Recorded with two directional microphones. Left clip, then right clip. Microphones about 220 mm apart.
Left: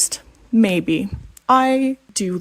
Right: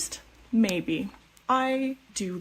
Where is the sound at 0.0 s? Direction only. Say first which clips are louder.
Left 13 dB; 45° left (ahead or behind).